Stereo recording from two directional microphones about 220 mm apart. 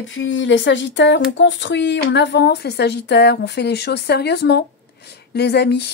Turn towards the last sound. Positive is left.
turn(degrees=50)  # may be behind; listen again after turning